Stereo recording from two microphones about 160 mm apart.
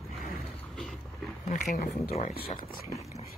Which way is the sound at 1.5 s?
65° left (ahead or behind).